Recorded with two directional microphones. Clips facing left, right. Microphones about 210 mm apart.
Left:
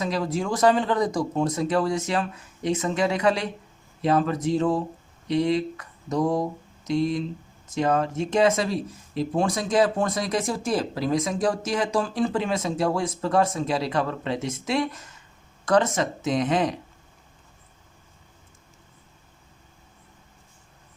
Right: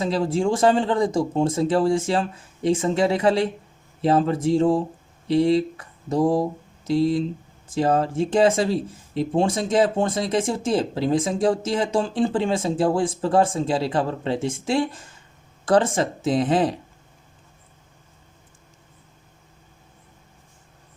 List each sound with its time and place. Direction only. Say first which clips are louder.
0.0 s speech: right 5 dB; 30° right (ahead or behind)